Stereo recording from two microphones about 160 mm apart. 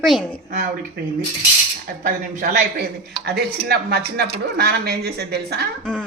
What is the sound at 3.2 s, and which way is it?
Speech, 90° right.